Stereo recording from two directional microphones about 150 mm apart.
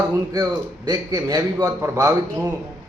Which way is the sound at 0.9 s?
25° right (ahead or behind).